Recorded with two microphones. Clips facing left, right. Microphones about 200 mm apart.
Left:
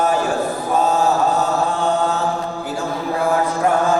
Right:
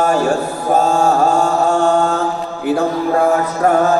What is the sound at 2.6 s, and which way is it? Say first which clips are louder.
Mantra: right 12 dB; 60° right (ahead or behind).